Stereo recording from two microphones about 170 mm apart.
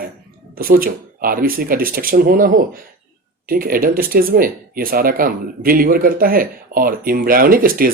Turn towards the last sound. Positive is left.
turn(degrees=-55)  # may be behind; listen again after turning